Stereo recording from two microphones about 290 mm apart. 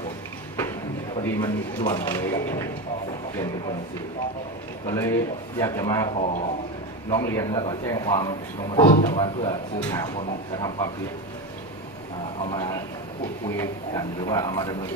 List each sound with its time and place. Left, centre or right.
1.1 s speech: centre
4.8 s speech: centre
12.4 s speech: centre